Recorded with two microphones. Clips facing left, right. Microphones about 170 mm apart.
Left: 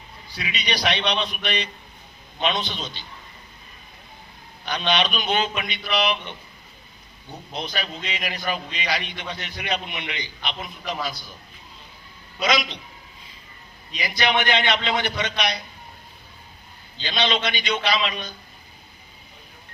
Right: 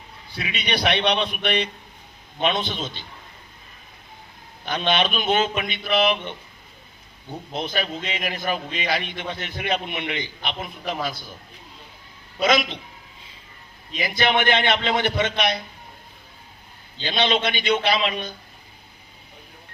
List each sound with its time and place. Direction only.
0.3 s a man's voice: 55° right (ahead or behind)
4.6 s a man's voice: 50° right (ahead or behind)
7.5 s a man's voice: 50° right (ahead or behind)
12.4 s a man's voice: 50° right (ahead or behind)
13.9 s a man's voice: 50° right (ahead or behind)
17.0 s a man's voice: 55° right (ahead or behind)